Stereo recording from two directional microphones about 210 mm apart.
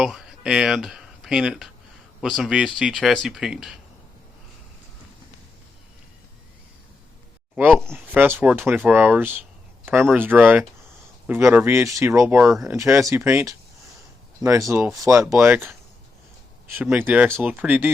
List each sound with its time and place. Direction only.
0.0 s speech: centre (ahead or behind)
7.5 s speech: centre (ahead or behind)
16.7 s speech: 10° right (ahead or behind)